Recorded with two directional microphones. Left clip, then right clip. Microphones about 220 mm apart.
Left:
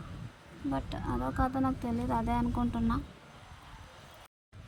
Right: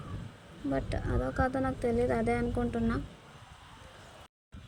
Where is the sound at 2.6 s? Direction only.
50° left (ahead or behind).